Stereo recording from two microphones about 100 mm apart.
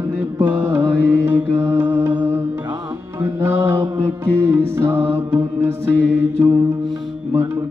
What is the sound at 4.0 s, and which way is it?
Music, 25° right (ahead or behind).